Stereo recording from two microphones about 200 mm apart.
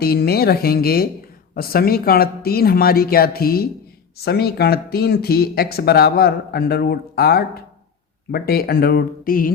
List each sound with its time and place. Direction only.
0.0 s speech: 50° left (ahead or behind)